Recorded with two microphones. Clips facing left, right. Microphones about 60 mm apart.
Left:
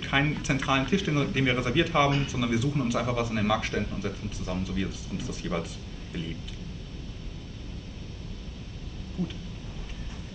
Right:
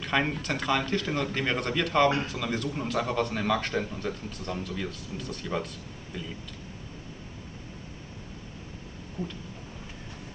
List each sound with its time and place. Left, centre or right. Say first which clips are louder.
0.0 s a man's voice: left 1 dB; centre
9.2 s speech: left 2 dB; right